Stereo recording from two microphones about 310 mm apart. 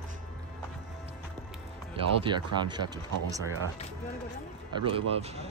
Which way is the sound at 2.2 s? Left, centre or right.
Centre.